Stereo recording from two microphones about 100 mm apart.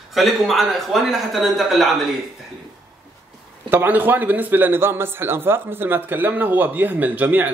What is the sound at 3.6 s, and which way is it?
A man's voice, 20° right (ahead or behind).